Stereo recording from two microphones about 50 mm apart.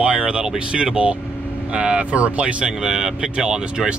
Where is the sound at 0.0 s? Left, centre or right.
Centre.